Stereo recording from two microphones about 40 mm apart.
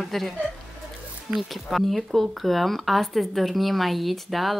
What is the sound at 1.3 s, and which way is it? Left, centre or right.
Speech, centre.